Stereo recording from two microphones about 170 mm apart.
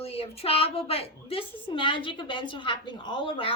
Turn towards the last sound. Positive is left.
turn(degrees=30)  # may be behind; listen again after turning